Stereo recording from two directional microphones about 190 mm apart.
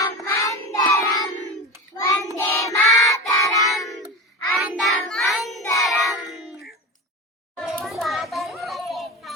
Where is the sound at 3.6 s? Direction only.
Centre (ahead or behind).